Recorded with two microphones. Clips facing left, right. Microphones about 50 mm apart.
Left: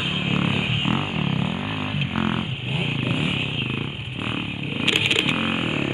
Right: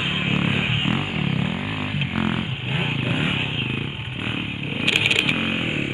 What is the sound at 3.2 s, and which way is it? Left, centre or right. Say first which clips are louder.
Motorcycle: right 1 dB; right.